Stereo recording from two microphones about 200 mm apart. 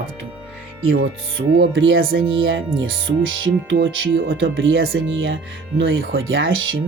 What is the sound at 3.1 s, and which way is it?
Speech, 50° right (ahead or behind).